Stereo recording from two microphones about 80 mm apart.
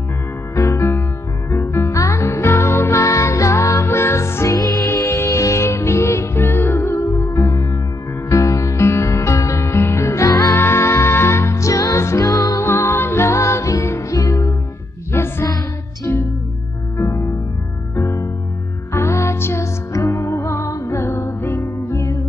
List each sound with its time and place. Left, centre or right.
0.6 s music: left
12.6 s music: left
15.1 s music: left
17.9 s music: left